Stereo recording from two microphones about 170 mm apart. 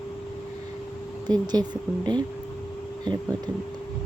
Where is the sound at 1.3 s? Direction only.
25° right (ahead or behind).